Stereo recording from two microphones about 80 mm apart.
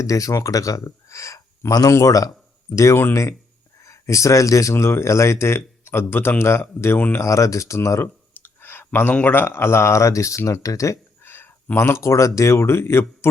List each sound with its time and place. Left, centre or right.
0.0 s speech: left
2.7 s speech: left
7.2 s speech: left
8.3 s clicking: left
9.3 s speech: left
11.2 s speech: left